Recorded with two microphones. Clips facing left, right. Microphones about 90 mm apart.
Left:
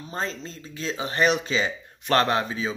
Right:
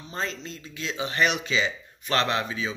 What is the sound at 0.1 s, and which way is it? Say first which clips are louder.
Speech: left 1 dB; 35° left (ahead or behind).